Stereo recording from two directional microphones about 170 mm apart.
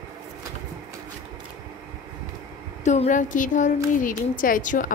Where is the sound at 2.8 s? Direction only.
45° left (ahead or behind).